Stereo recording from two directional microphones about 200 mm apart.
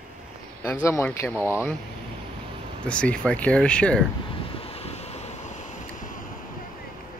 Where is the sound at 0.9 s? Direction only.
15° left (ahead or behind).